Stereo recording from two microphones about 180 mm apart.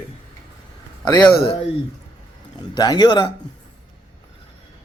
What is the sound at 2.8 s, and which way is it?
Speech, 20° left (ahead or behind).